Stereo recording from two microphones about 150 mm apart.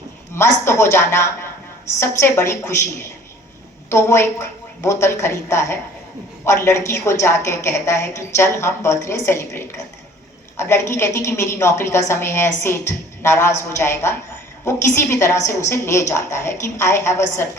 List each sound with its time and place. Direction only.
0.3 s a woman's voice: 20° left (ahead or behind)